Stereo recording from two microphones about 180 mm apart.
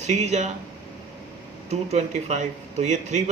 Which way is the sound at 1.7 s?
40° right (ahead or behind).